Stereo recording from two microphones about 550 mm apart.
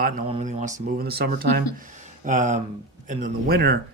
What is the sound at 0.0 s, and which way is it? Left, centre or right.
Speech, centre.